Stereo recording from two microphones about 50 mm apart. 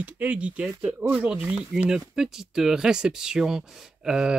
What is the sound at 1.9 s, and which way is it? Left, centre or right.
Speech, centre.